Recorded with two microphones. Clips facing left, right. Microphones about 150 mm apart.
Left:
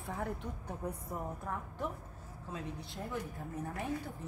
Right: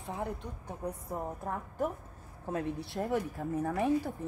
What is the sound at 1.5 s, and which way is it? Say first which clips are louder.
Speech: right 4 dB; 45° right (ahead or behind).